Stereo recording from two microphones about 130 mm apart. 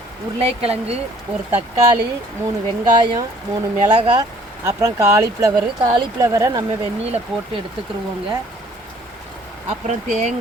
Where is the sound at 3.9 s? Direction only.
40° right (ahead or behind).